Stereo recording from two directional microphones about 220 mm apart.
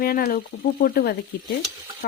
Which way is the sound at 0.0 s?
45° left (ahead or behind).